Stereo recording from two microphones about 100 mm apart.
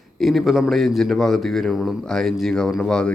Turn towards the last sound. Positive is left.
turn(degrees=10)  # may be behind; listen again after turning